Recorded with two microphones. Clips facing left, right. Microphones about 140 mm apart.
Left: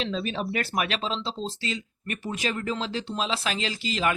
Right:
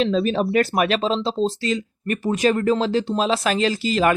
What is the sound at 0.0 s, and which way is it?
Speech, 45° right (ahead or behind).